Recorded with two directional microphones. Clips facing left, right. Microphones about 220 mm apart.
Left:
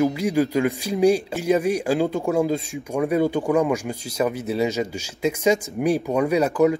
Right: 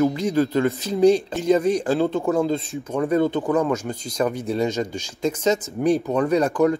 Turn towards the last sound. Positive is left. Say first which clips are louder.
# even
turn(degrees=10)  # may be behind; listen again after turning